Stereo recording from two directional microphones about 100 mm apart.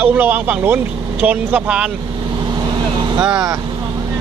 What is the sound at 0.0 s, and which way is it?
Speech, 15° right (ahead or behind).